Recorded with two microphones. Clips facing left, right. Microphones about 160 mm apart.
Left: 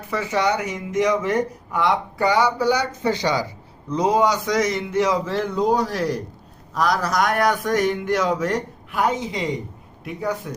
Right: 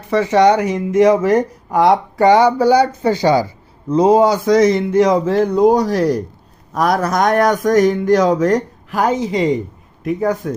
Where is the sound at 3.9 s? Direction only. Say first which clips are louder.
Right 7 dB; 30° right (ahead or behind).